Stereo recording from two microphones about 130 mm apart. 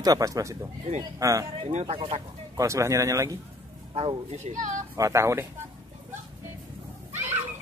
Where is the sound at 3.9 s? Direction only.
50° right (ahead or behind).